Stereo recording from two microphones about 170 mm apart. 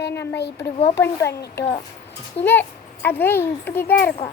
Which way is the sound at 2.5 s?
10° left (ahead or behind).